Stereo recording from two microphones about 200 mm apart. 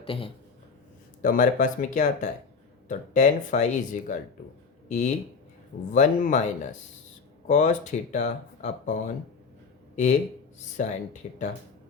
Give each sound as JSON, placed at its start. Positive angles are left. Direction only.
{"t": 0.0, "sound": "a man's voice", "side_deg": 25}
{"t": 1.2, "sound": "speech", "side_deg": 40}
{"t": 7.4, "sound": "speech", "side_deg": 40}